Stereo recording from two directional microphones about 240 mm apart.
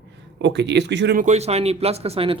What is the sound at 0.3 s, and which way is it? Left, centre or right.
Speech, right.